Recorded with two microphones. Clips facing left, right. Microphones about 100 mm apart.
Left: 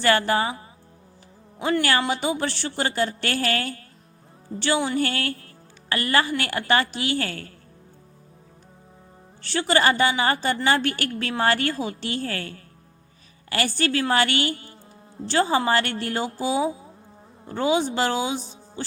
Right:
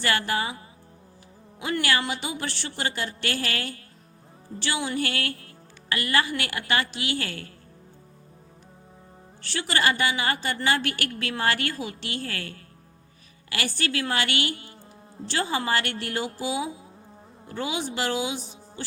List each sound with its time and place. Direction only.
0.0 s a woman's voice: 35° left (ahead or behind)
1.8 s a woman's voice: 35° left (ahead or behind)
9.4 s a woman's voice: 30° left (ahead or behind)